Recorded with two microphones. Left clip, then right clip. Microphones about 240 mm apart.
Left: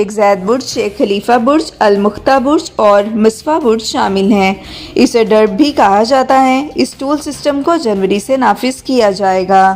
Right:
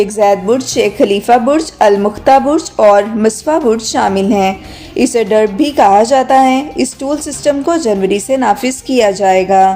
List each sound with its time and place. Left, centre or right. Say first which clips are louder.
0.0 s a woman's voice: even; left